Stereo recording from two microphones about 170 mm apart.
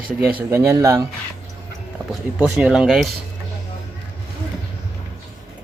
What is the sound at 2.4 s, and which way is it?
Speech, 5° right (ahead or behind).